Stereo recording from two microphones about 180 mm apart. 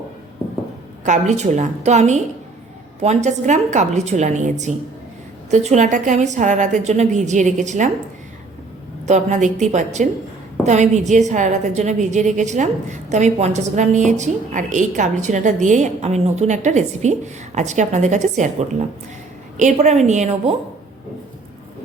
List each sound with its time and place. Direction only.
1.0 s a woman's voice: 40° right (ahead or behind)
9.0 s a woman's voice: 40° right (ahead or behind)